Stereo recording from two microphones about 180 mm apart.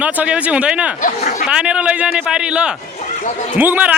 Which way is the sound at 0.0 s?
5° right (ahead or behind).